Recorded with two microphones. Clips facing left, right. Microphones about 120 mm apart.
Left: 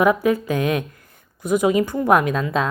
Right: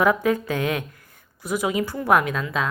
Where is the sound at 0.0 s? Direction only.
15° left (ahead or behind).